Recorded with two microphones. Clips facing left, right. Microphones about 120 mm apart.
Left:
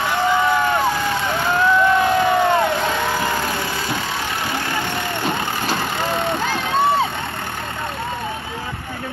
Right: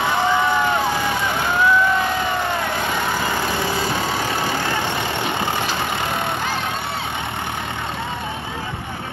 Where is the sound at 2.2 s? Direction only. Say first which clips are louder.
Left 6 dB; 60° left (ahead or behind).